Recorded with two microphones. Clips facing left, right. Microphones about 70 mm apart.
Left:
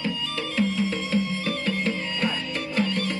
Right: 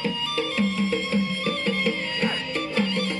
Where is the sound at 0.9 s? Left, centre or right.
Right.